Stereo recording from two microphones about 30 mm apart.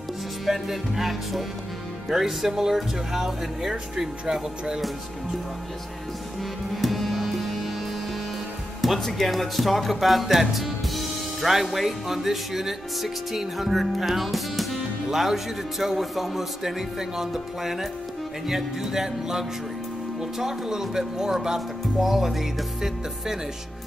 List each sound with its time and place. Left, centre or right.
0.5 s speech: centre
6.7 s music: centre
8.8 s speech: centre